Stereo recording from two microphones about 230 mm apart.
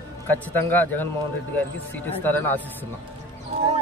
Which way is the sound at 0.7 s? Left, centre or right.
Centre.